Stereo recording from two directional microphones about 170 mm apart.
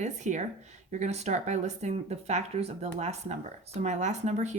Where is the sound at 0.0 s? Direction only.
45° right (ahead or behind).